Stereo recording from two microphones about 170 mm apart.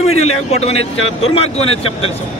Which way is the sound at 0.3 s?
35° left (ahead or behind).